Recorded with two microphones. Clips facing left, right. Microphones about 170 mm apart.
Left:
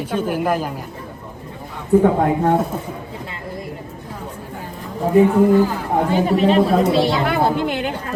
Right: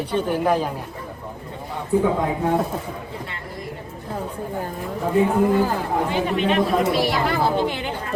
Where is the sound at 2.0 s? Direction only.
60° left (ahead or behind).